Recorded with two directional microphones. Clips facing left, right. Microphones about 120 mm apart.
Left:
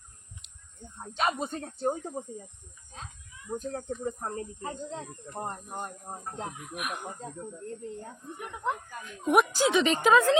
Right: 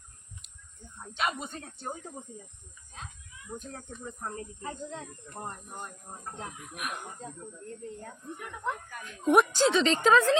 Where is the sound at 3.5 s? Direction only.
35° left (ahead or behind).